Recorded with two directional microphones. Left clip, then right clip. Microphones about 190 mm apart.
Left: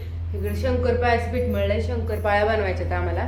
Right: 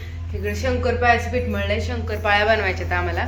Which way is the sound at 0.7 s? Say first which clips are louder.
Right 3 dB; 30° right (ahead or behind).